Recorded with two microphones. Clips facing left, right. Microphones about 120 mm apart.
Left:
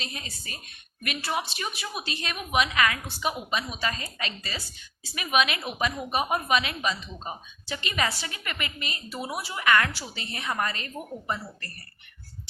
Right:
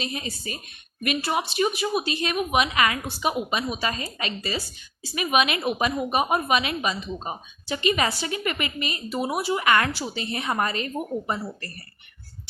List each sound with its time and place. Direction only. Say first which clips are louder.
0.0 s a woman's voice: right 8 dB; 15° right (ahead or behind)